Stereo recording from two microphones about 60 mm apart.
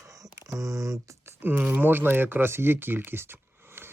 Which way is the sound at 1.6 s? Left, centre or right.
Right.